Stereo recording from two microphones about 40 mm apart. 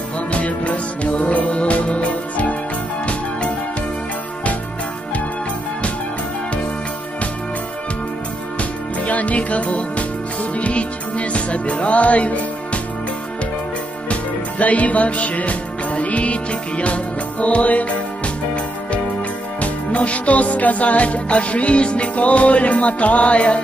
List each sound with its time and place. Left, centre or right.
0.3 s music: left
8.5 s music: left
14.6 s music: left
19.6 s music: left